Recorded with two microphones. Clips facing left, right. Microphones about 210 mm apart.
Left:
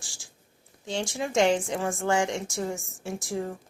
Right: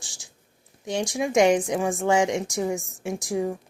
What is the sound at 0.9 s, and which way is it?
A woman's voice, 15° right (ahead or behind).